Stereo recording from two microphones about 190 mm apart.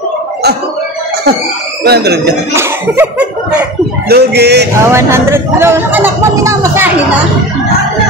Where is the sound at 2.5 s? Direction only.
10° right (ahead or behind).